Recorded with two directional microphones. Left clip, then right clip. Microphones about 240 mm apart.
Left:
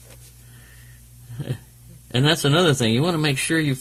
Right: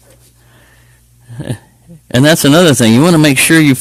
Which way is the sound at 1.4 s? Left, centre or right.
Right.